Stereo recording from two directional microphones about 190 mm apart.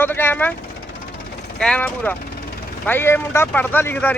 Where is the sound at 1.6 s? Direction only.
5° left (ahead or behind).